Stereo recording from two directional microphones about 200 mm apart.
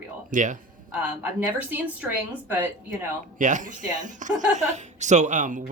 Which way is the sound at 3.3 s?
40° right (ahead or behind).